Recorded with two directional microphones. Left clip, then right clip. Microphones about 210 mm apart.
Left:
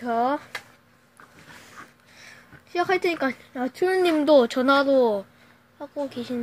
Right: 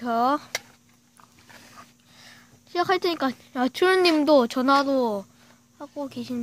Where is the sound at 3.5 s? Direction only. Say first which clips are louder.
Right 4 dB; 35° right (ahead or behind).